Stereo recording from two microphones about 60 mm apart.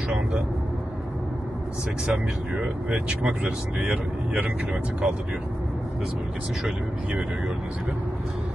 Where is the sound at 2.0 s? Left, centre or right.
Centre.